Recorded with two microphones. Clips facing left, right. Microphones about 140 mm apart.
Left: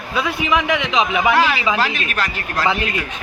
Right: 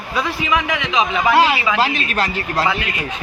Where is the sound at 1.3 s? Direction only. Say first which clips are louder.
Right 2 dB; 20° right (ahead or behind).